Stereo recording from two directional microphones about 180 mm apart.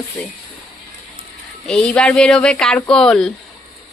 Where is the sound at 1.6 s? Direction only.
5° left (ahead or behind).